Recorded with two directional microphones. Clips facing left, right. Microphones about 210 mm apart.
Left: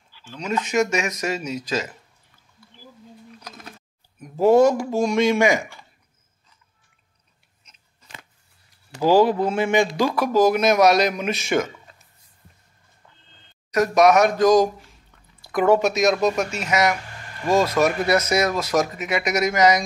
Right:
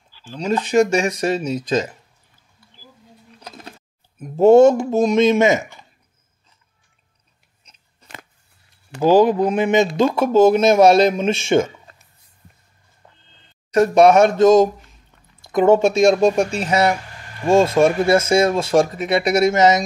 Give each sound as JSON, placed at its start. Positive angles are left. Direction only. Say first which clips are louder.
{"t": 0.1, "sound": "speech", "louder": "right 5 dB", "side_deg": -35}
{"t": 3.3, "sound": "a sound", "louder": "right 6 dB", "side_deg": -30}
{"t": 4.2, "sound": "speech", "louder": "right 5 dB", "side_deg": -25}
{"t": 9.0, "sound": "speech", "louder": "right 3 dB", "side_deg": -20}
{"t": 13.7, "sound": "speech", "louder": "right 4 dB", "side_deg": -30}